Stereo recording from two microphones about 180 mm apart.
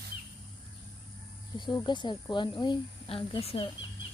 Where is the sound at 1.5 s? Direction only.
25° left (ahead or behind).